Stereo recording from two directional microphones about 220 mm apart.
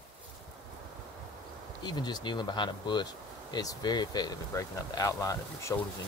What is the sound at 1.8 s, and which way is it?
Speech, 20° left (ahead or behind).